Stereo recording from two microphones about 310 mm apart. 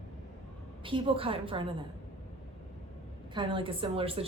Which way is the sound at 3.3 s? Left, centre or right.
Centre.